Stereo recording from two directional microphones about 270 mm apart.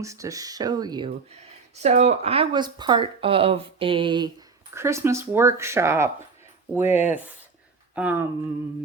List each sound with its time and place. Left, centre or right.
0.0 s speech: centre